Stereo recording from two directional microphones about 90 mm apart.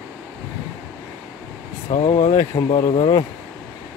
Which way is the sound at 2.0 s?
75° left (ahead or behind).